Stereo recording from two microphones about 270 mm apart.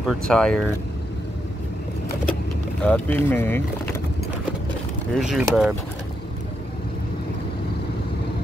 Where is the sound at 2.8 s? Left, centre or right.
Centre.